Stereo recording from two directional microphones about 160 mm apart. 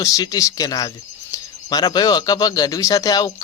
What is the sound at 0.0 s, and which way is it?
Speech, 20° left (ahead or behind).